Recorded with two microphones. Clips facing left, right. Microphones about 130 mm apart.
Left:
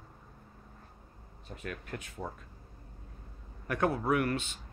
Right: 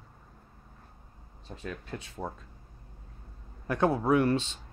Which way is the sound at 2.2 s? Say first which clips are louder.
Right 3 dB; 15° right (ahead or behind).